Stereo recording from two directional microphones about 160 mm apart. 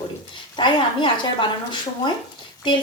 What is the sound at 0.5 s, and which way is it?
A woman's voice, 30° left (ahead or behind).